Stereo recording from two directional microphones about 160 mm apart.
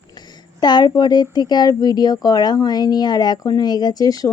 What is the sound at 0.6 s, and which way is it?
Speech, 25° left (ahead or behind).